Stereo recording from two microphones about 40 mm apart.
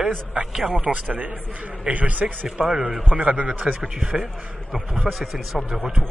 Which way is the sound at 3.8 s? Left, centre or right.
Right.